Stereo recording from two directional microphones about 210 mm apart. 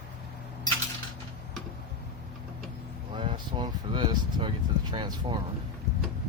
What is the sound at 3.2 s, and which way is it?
Speech, 20° right (ahead or behind).